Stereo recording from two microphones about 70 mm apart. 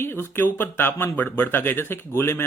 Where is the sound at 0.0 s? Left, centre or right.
Left.